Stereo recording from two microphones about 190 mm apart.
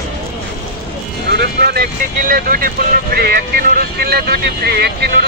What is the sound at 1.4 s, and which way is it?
Speech, 55° right (ahead or behind).